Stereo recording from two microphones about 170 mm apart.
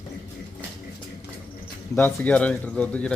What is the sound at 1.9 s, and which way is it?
Speech, 10° left (ahead or behind).